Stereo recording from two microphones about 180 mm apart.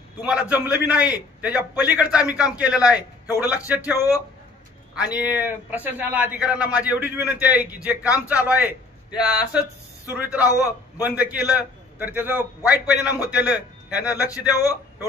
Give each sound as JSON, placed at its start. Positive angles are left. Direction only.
{"t": 0.2, "sound": "a man's voice", "side_deg": -5}